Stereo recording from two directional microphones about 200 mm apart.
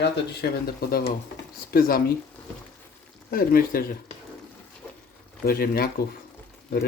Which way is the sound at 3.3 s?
45° left (ahead or behind).